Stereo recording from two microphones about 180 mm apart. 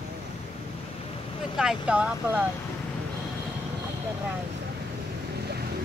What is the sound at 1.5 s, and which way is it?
Speech, 5° right (ahead or behind).